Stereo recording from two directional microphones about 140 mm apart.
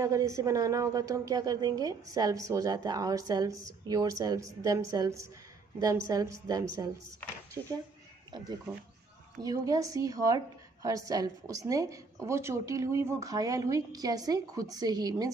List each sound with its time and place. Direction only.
0.0 s a woman's voice: 20° right (ahead or behind)
9.4 s a woman's voice: 25° right (ahead or behind)